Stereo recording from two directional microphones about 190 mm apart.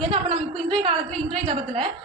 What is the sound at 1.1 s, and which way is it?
Speech, 5° left (ahead or behind).